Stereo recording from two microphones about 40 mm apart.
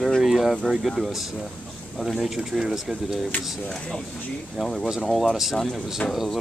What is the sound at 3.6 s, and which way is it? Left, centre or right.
Speech, left.